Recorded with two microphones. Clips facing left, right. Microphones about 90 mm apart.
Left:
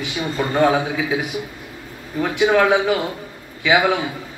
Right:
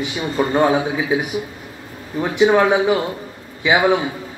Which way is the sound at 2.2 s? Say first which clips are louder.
Right 2 dB; 20° right (ahead or behind).